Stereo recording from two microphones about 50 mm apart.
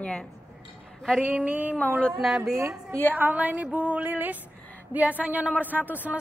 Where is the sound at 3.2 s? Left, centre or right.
Right.